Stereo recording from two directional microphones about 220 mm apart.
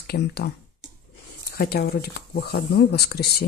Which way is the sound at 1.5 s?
45° left (ahead or behind).